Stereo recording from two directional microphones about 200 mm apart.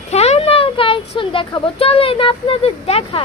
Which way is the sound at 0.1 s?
30° left (ahead or behind).